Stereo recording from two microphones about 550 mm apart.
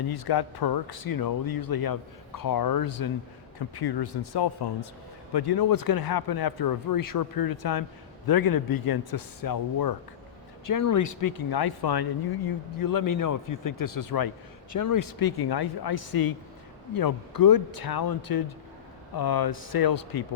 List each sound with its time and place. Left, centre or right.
0.1 s speech: left